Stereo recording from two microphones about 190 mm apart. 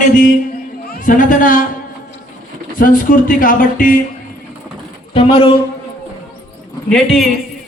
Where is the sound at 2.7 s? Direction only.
45° left (ahead or behind).